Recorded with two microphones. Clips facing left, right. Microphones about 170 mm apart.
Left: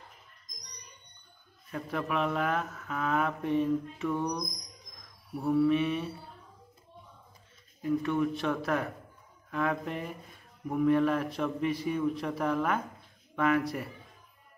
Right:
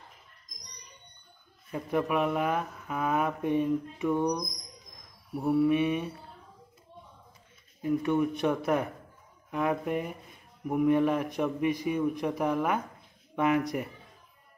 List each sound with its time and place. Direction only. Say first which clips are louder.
1.7 s speech: right 4 dB; 15° right (ahead or behind)
7.8 s speech: right 2 dB; 15° right (ahead or behind)